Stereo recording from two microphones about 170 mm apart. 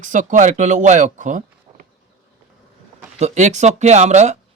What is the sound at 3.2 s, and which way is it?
Speech, 40° right (ahead or behind).